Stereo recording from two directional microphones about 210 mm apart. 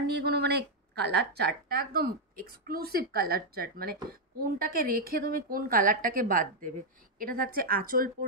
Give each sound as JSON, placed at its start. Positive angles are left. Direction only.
{"t": 0.1, "sound": "a woman's voice", "side_deg": -50}